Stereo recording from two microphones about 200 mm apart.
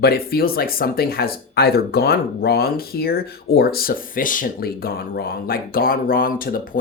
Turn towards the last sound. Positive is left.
turn(degrees=45)  # may be behind; listen again after turning